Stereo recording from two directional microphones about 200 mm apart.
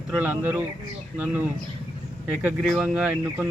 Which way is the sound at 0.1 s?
5° right (ahead or behind).